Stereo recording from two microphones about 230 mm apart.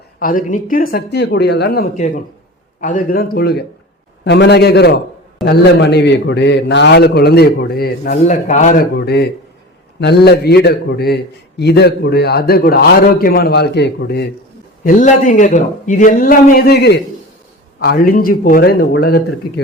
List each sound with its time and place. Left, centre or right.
0.2 s a man's voice: left
14.8 s a man's voice: left